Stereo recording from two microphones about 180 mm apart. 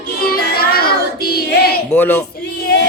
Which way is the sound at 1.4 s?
60° left (ahead or behind).